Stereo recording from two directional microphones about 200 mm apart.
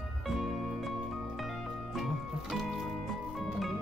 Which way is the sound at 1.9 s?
Centre (ahead or behind).